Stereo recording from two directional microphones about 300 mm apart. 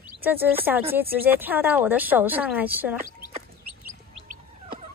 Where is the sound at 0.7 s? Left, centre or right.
Centre.